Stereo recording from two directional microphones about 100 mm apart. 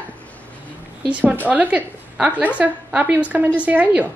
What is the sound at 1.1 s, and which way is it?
A woman's voice, 15° right (ahead or behind).